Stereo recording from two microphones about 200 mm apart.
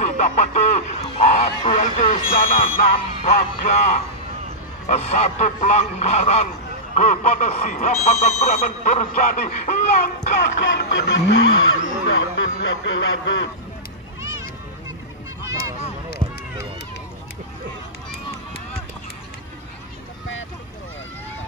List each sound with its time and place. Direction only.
0.0 s speech: 35° left (ahead or behind)
10.8 s fowl: 60° left (ahead or behind)